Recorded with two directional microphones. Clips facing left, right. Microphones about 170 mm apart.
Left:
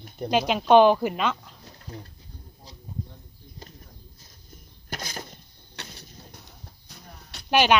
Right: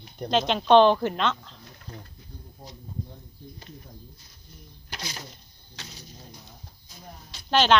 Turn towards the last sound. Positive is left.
turn(degrees=10)  # may be behind; listen again after turning